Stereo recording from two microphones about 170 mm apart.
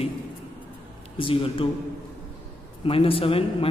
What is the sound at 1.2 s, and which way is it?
Speech, 30° left (ahead or behind).